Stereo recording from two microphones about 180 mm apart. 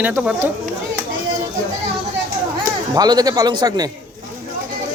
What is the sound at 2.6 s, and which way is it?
Speech, 20° right (ahead or behind).